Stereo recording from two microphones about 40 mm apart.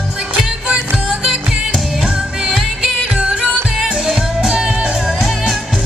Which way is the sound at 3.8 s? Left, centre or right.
Centre.